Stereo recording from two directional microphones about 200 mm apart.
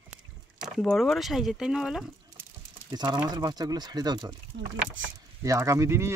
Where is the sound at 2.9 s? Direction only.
20° right (ahead or behind).